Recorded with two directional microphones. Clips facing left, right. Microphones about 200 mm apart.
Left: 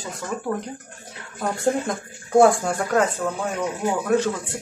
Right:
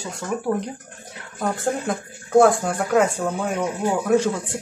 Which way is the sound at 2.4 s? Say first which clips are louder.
Even; centre (ahead or behind).